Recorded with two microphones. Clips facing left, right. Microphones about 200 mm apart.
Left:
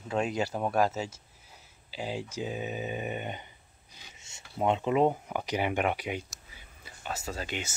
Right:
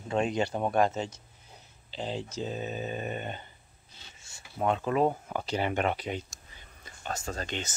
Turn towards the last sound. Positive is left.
turn(degrees=10)  # may be behind; listen again after turning